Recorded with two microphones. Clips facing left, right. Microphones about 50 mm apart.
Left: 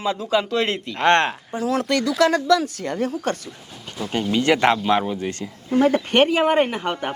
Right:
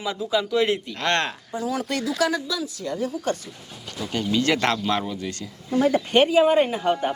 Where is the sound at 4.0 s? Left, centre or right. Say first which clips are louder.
Left 2 dB; centre; by 7.1 s left.